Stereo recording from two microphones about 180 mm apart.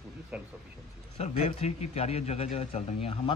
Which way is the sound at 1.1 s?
40° left (ahead or behind).